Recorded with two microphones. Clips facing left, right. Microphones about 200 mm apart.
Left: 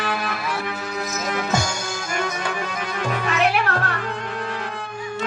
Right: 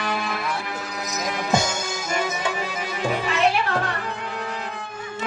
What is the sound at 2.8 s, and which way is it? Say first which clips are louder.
Music: right 1 dB; 60° left (ahead or behind).